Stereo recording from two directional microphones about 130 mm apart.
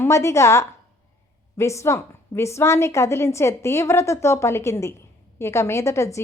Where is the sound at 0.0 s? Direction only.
20° left (ahead or behind).